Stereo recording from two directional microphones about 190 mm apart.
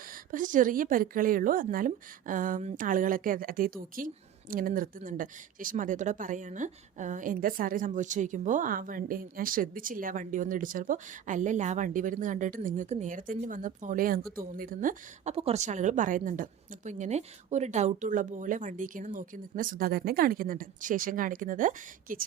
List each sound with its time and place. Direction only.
0.3 s speech: 45° right (ahead or behind)